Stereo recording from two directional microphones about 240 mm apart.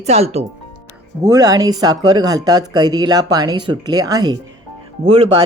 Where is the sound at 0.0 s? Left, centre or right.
Right.